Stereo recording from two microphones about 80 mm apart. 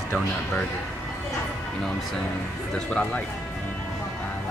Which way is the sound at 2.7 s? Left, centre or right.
Centre.